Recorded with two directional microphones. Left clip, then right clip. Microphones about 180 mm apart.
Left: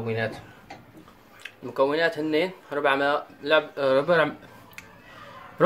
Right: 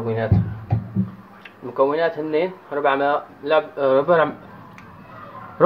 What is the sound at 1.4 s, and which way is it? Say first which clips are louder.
Speech: right 4 dB; 5° left (ahead or behind).